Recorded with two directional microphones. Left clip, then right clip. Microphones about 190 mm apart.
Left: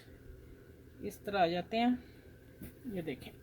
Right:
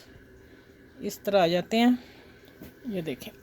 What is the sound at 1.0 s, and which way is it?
Speech, 55° right (ahead or behind).